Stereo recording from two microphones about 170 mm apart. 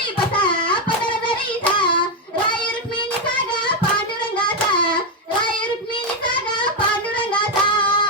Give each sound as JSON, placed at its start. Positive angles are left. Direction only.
{"t": 7.3, "sound": "child singing", "side_deg": 30}